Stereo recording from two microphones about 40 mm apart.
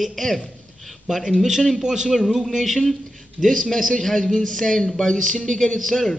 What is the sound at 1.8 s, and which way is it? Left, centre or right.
Speech, centre.